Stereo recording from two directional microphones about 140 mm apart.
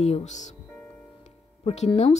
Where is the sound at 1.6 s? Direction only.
50° left (ahead or behind).